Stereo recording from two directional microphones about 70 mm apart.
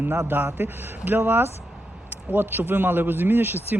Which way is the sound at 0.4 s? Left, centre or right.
Right.